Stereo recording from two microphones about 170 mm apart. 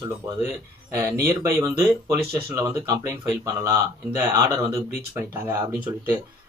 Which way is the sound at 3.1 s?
15° right (ahead or behind).